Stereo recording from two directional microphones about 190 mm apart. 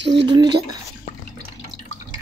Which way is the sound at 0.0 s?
70° right (ahead or behind).